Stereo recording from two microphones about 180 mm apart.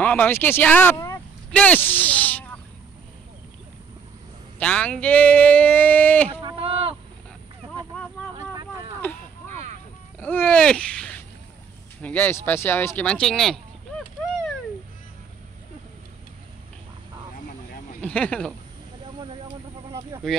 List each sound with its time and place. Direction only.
0.0 s speech: 10° left (ahead or behind)
4.6 s speech: 5° left (ahead or behind)
6.4 s a sound: 30° right (ahead or behind)
9.5 s music: 40° right (ahead or behind)
10.1 s babbling: 10° left (ahead or behind)
12.0 s speech: 10° left (ahead or behind)
18.0 s speech: 5° left (ahead or behind)
19.1 s vehicle: 30° right (ahead or behind)
19.9 s a sound: 15° right (ahead or behind)